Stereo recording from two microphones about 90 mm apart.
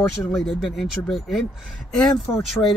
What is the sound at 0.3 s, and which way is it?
Speech, 5° left (ahead or behind).